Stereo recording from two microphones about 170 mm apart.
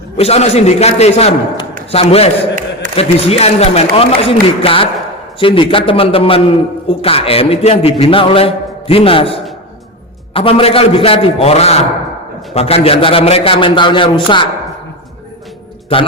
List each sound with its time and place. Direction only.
0.2 s a man's voice: 40° left (ahead or behind)
15.9 s a man's voice: 35° left (ahead or behind)